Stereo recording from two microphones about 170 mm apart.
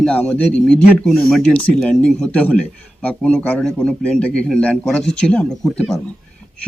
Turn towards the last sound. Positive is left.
turn(degrees=5)  # may be behind; listen again after turning